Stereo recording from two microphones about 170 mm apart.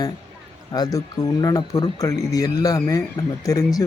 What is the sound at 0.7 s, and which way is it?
Speech, 20° left (ahead or behind).